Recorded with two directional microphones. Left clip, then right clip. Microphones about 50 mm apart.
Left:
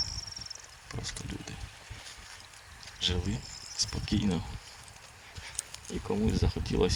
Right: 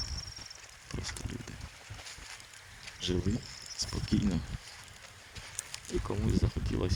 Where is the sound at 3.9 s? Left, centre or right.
Left.